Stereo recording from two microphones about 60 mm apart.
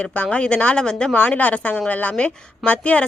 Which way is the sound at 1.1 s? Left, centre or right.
Left.